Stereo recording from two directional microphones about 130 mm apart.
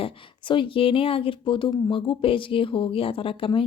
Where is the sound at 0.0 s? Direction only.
40° left (ahead or behind).